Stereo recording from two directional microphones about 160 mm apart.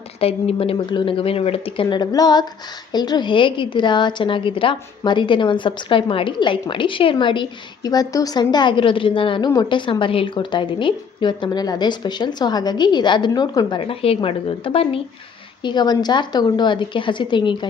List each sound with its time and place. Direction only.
0.2 s a woman's voice: 35° left (ahead or behind)
13.7 s a woman's voice: 35° left (ahead or behind)